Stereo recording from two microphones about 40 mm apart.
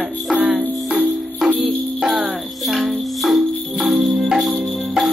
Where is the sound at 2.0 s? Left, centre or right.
Centre.